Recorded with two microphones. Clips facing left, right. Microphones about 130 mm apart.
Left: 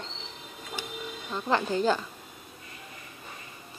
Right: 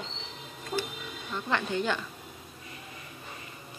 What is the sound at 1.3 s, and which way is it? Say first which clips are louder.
Speech: left 3 dB; 35° left (ahead or behind).